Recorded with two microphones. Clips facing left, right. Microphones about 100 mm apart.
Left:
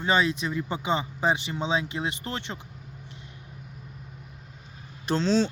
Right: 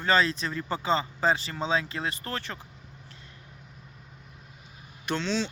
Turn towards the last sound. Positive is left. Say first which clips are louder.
# left 6 dB
turn(degrees=40)  # may be behind; listen again after turning